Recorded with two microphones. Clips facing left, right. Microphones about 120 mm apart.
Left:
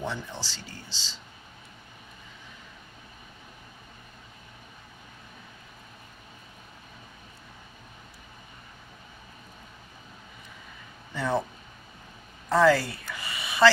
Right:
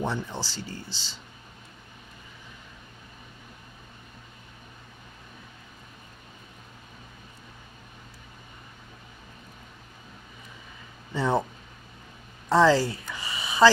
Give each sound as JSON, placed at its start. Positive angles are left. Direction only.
{"t": 0.0, "sound": "speech", "side_deg": -45}
{"t": 11.1, "sound": "speech", "side_deg": -25}
{"t": 12.4, "sound": "a woman's voice", "side_deg": -25}
{"t": 12.9, "sound": "a sound", "side_deg": -25}